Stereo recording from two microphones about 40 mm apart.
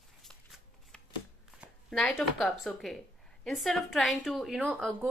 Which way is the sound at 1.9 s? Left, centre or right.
Centre.